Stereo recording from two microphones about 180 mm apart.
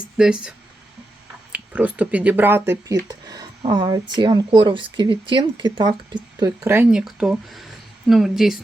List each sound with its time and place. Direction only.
0.2 s speech: 5° right (ahead or behind)
1.5 s speech: 10° right (ahead or behind)
7.0 s speech: centre (ahead or behind)